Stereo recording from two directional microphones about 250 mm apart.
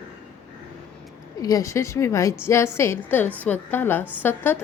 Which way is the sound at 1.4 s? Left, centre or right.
Centre.